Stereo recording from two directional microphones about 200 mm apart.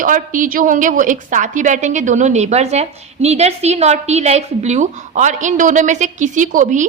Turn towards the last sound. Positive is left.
turn(degrees=-40)  # may be behind; listen again after turning